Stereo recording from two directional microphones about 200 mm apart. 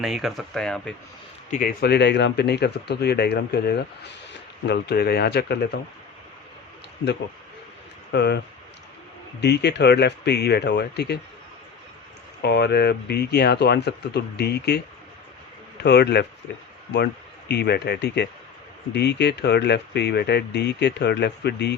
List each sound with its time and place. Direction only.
0.0 s speech: centre (ahead or behind)
1.5 s speech: 40° left (ahead or behind)
8.1 s speech: 55° left (ahead or behind)
9.4 s speech: 55° left (ahead or behind)
12.4 s speech: 55° left (ahead or behind)
15.8 s speech: 55° left (ahead or behind)
17.5 s speech: 55° left (ahead or behind)